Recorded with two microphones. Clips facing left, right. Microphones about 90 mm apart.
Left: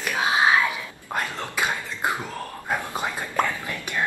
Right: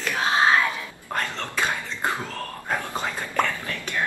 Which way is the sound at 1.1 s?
15° left (ahead or behind).